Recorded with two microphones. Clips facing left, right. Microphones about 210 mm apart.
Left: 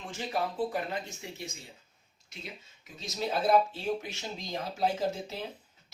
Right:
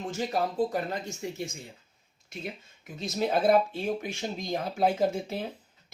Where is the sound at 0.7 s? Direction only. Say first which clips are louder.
Right 3 dB; 45° right (ahead or behind).